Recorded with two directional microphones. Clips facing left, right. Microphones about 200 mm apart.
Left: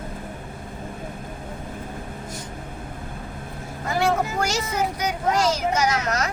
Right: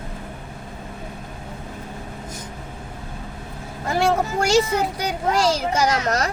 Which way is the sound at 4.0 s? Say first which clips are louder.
Right 2 dB; 30° right (ahead or behind).